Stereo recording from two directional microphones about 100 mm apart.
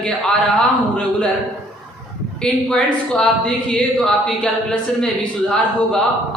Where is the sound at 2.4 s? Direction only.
10° left (ahead or behind).